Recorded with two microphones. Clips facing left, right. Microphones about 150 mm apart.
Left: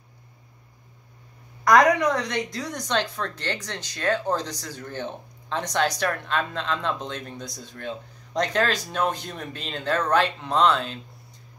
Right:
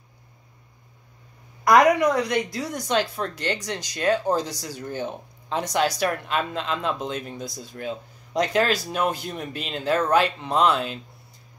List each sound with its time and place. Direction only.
1.6 s a woman's voice: 10° right (ahead or behind)